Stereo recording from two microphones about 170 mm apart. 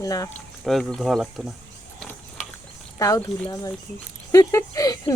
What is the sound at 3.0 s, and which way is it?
Speech, 15° left (ahead or behind).